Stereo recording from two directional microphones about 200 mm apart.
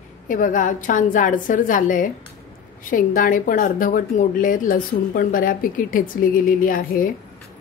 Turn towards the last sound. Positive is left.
turn(degrees=45)  # may be behind; listen again after turning